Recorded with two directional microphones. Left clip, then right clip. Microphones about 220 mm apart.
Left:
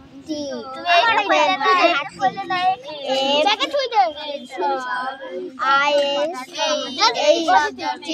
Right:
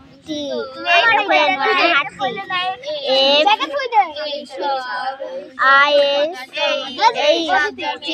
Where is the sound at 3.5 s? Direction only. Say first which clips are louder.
Right 3 dB; 45° left (ahead or behind).